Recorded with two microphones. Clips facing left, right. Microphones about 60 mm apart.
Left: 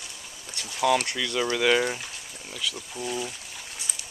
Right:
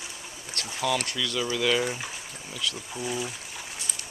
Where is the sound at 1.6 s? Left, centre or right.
Centre.